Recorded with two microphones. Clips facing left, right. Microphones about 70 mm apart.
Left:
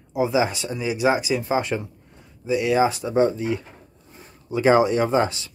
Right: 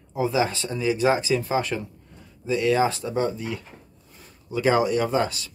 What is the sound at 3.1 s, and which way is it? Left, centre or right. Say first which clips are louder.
Speech: left 6 dB; left.